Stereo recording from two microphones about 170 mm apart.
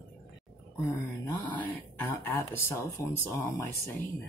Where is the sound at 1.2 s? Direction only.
15° left (ahead or behind).